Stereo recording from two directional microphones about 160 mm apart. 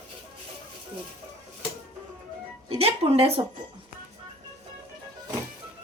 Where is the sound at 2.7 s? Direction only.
40° right (ahead or behind).